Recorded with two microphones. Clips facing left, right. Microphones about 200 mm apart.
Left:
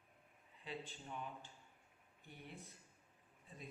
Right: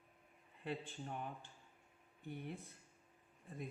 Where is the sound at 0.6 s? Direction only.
55° right (ahead or behind).